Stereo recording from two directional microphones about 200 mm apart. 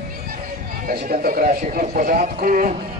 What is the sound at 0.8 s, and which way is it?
A man's voice, 45° right (ahead or behind).